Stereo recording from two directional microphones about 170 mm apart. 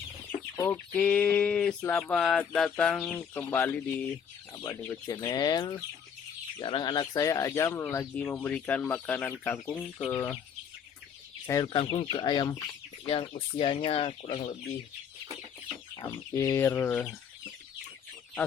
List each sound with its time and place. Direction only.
0.5 s chicken: 20° left (ahead or behind)
0.9 s speech: 5° left (ahead or behind)
11.4 s speech: 20° left (ahead or behind)
16.0 s speech: 15° left (ahead or behind)